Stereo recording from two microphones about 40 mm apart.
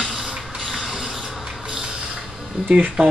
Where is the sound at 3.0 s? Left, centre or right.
Centre.